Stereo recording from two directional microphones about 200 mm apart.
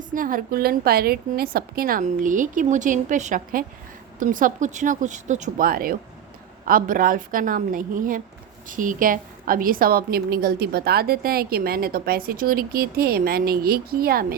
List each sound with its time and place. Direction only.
0.1 s a woman's voice: 45° right (ahead or behind)